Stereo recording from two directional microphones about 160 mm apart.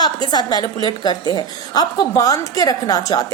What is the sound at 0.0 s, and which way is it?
A woman's voice, 25° left (ahead or behind).